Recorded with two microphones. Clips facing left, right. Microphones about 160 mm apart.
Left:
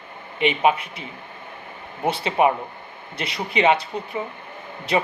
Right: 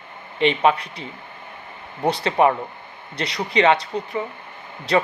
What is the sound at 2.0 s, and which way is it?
Speech, 10° left (ahead or behind).